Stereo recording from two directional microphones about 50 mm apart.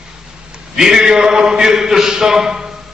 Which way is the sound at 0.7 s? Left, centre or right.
Centre.